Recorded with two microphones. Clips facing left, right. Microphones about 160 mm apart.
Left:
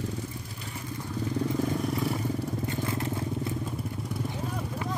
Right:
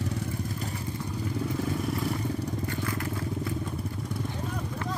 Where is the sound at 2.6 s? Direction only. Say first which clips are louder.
Left 1 dB; 25° left (ahead or behind).